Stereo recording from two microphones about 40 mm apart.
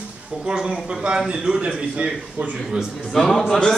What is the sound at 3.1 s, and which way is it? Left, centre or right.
Speech, centre.